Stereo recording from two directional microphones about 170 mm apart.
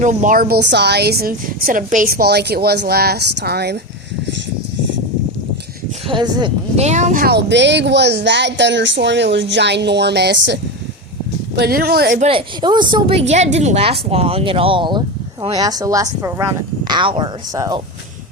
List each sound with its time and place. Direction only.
0.0 s speech: 45° right (ahead or behind); by 3.8 s 75° right (ahead or behind)
6.1 s speech: 25° right (ahead or behind)
6.7 s speech: 45° right (ahead or behind); by 10.6 s 90° right
11.5 s speech: 70° right (ahead or behind)
12.3 s a woman's voice: 25° right (ahead or behind)